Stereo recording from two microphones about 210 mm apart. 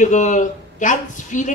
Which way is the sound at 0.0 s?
35° left (ahead or behind).